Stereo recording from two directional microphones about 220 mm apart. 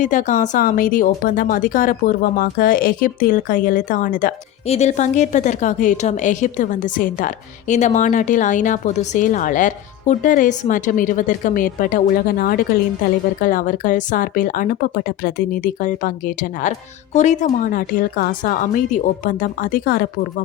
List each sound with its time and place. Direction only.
0.0 s speech: 35° left (ahead or behind)